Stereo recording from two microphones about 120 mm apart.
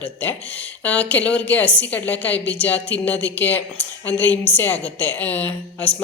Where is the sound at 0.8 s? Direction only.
10° left (ahead or behind).